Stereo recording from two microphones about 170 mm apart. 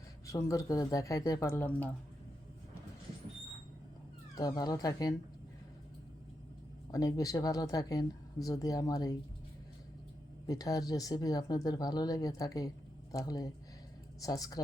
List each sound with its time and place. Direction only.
0.3 s speech: 20° left (ahead or behind)
4.4 s speech: 20° left (ahead or behind)
6.9 s speech: 20° left (ahead or behind)
10.4 s speech: 20° left (ahead or behind)